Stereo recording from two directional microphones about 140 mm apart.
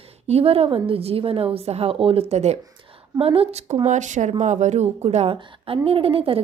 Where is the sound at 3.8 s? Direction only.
60° right (ahead or behind).